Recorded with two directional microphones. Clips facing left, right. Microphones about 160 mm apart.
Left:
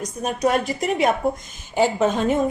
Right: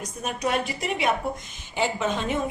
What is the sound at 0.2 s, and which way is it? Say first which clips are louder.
A woman's voice: left 6 dB; 40° left (ahead or behind).